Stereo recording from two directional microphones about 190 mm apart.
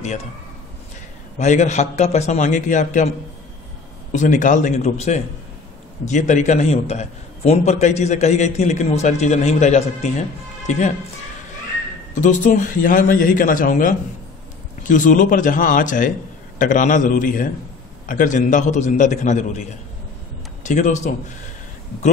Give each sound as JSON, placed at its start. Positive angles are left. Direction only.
{"t": 1.4, "sound": "a man's voice", "side_deg": 40}
{"t": 12.2, "sound": "a man's voice", "side_deg": 40}